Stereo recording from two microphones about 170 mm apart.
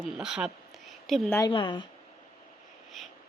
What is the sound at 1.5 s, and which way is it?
Speech, 30° left (ahead or behind).